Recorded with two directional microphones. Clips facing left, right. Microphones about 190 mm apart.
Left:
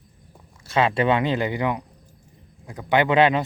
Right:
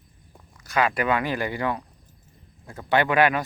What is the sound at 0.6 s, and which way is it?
Speech, 25° left (ahead or behind).